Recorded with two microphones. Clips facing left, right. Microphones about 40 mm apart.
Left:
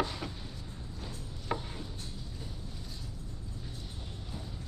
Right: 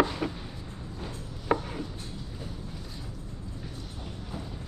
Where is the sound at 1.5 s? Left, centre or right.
Right.